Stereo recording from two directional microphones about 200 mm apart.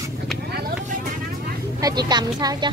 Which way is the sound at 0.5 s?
50° right (ahead or behind).